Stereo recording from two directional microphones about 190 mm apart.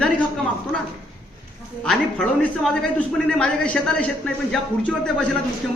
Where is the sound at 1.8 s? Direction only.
5° left (ahead or behind).